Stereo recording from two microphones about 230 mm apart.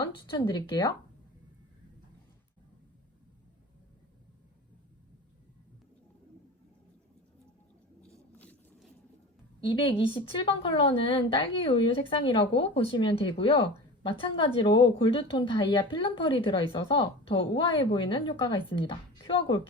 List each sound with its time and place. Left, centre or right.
0.0 s speech: centre
8.4 s a sound: centre
9.6 s a woman's voice: left